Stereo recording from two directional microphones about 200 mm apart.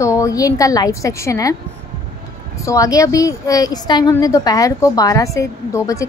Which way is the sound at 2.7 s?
15° left (ahead or behind).